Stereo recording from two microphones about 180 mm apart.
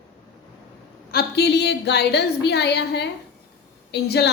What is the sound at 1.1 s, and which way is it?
A woman's voice, 65° left (ahead or behind).